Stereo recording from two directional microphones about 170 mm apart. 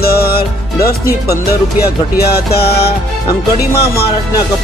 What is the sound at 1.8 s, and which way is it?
Speech, 65° left (ahead or behind).